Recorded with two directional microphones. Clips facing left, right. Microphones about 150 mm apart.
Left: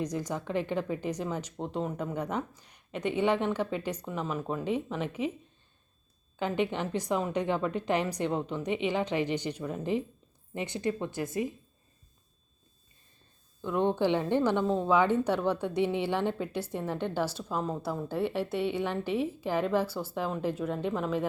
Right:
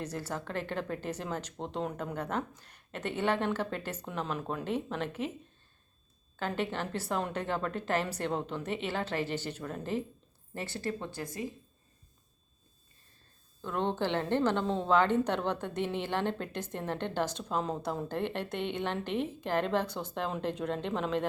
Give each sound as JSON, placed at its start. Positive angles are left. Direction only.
{"t": 0.0, "sound": "a woman's voice", "side_deg": 15}
{"t": 2.1, "sound": "a woman's voice", "side_deg": 10}
{"t": 6.3, "sound": "a woman's voice", "side_deg": 15}
{"t": 13.6, "sound": "a woman's voice", "side_deg": 15}